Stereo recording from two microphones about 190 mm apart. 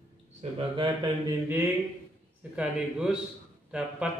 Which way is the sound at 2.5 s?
5° right (ahead or behind).